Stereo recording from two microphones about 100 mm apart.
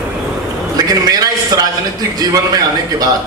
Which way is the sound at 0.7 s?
40° right (ahead or behind).